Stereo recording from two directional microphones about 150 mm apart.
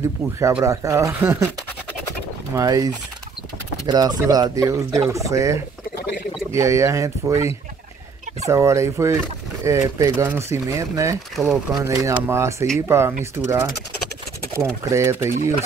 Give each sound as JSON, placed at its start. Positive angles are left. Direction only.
{"t": 0.4, "sound": "speech", "side_deg": -20}
{"t": 2.5, "sound": "speech", "side_deg": -25}
{"t": 11.3, "sound": "speech", "side_deg": 0}
{"t": 11.8, "sound": "speech", "side_deg": -20}
{"t": 14.9, "sound": "speech", "side_deg": -20}